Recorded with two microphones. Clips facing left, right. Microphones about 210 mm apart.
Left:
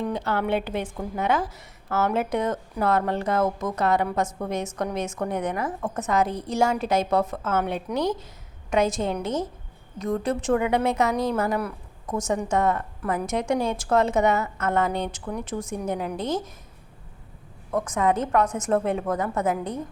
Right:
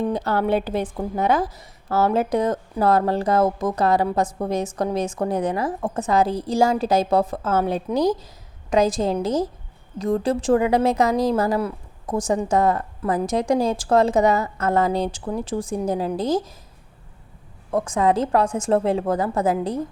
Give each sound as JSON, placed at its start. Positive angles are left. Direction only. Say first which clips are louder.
{"t": 0.0, "sound": "a woman's voice", "louder": "right 4 dB", "side_deg": -35}
{"t": 17.7, "sound": "a woman's voice", "louder": "right 3 dB", "side_deg": -30}